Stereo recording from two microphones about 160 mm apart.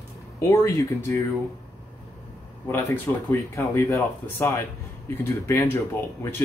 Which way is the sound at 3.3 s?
15° left (ahead or behind).